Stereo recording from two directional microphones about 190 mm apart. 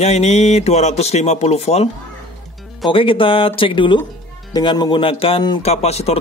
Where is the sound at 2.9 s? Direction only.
25° left (ahead or behind).